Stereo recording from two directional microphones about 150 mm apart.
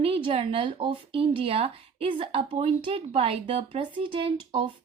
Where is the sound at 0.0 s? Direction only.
40° right (ahead or behind).